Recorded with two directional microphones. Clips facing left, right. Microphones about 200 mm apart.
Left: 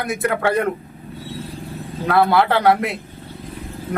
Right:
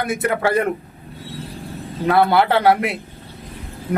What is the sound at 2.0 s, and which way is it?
Speech, 25° right (ahead or behind).